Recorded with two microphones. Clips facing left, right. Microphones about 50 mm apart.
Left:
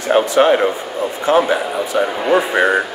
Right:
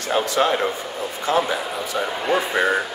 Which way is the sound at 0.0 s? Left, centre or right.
Left.